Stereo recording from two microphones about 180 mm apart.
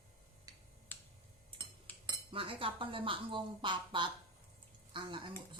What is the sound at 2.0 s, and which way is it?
Speech, 25° right (ahead or behind).